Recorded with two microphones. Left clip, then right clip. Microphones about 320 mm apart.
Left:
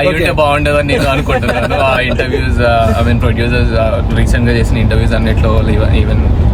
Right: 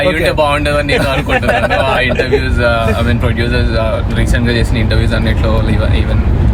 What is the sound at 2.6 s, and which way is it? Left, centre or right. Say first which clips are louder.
Speech: left 2 dB; centre.